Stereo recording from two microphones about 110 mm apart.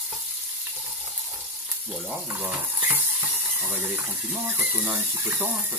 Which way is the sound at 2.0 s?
15° right (ahead or behind).